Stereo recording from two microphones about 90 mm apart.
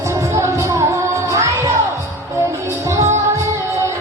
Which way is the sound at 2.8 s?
35° right (ahead or behind).